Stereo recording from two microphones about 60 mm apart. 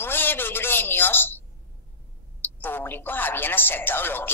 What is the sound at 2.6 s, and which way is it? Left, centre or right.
A man's voice, left.